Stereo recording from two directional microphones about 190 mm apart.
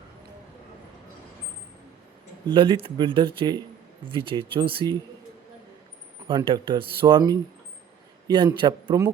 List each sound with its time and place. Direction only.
2.5 s speech: 25° right (ahead or behind)
6.2 s speech: 25° right (ahead or behind)